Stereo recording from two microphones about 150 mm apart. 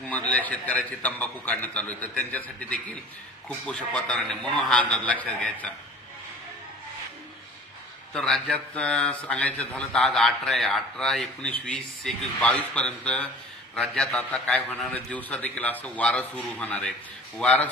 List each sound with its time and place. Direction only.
0.0 s a man's voice: 10° left (ahead or behind)
8.1 s a man's voice: 5° left (ahead or behind)